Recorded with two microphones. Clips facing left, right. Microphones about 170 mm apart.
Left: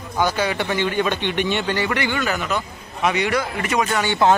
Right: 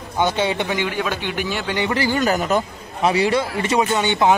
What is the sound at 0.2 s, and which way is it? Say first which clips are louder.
Speech: right 1 dB; 25° right (ahead or behind).